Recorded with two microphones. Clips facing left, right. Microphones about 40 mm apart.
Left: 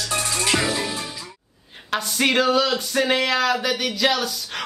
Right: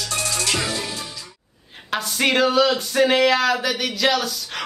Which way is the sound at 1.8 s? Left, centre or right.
Centre.